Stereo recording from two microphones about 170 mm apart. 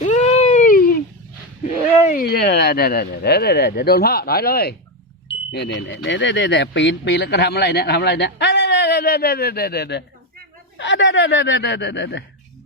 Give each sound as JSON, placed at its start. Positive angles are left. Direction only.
{"t": 0.0, "sound": "a sound", "side_deg": 45}
{"t": 2.0, "sound": "speech", "side_deg": 60}
{"t": 5.5, "sound": "speech", "side_deg": 90}
{"t": 10.8, "sound": "speech", "side_deg": 90}